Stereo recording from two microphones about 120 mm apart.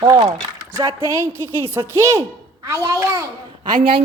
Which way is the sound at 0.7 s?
25° right (ahead or behind).